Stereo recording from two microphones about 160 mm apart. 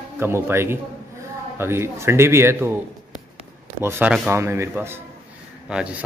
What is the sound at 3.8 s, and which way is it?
A man's voice, 15° right (ahead or behind).